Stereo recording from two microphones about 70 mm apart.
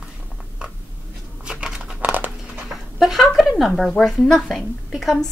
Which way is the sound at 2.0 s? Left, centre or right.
Right.